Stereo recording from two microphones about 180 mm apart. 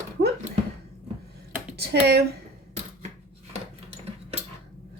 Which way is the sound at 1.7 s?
65° right (ahead or behind).